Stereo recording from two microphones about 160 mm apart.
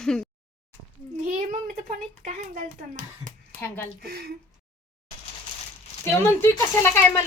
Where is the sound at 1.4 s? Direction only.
50° right (ahead or behind).